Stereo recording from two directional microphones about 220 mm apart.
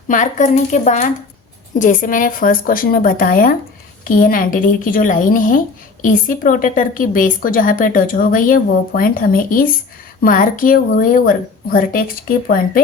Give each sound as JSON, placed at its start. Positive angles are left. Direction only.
{"t": 0.1, "sound": "a woman's voice", "side_deg": 35}